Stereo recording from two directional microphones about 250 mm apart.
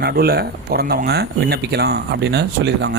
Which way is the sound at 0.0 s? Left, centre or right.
Right.